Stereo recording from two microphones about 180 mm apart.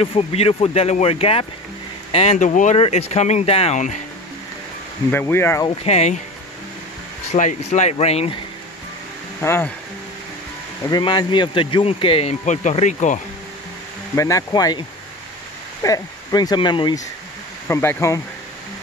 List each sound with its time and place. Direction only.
0.0 s speech: 30° left (ahead or behind)
5.1 s speech: 15° left (ahead or behind)
5.7 s speech: 35° left (ahead or behind)
7.3 s speech: 40° left (ahead or behind)
9.4 s speech: 15° left (ahead or behind)
10.9 s speech: 25° left (ahead or behind); by 13.2 s 40° left (ahead or behind)
14.1 s speech: 15° left (ahead or behind)
17.6 s speech: 15° left (ahead or behind)